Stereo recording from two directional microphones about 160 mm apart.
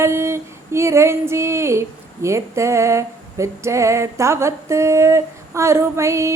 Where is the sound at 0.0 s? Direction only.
15° right (ahead or behind).